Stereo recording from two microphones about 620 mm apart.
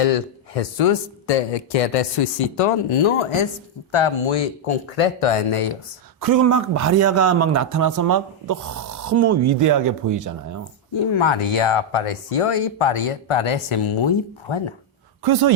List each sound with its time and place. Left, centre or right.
0.0 s a man's voice: left
6.1 s a man's voice: right
11.1 s speech: left
15.2 s speech: right